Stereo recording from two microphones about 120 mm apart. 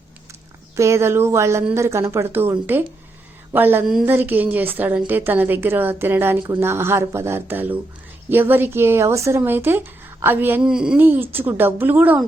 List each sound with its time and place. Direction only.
0.8 s speech: 25° right (ahead or behind)
3.5 s a woman's voice: 15° right (ahead or behind)
10.6 s speech: 5° right (ahead or behind)
11.0 s a woman's voice: 15° right (ahead or behind)